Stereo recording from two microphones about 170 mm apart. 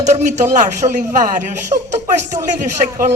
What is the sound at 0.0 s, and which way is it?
Speech, 45° right (ahead or behind).